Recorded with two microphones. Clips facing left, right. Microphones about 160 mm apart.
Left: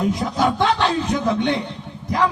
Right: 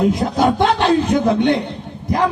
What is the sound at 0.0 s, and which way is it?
A man's voice, 55° right (ahead or behind).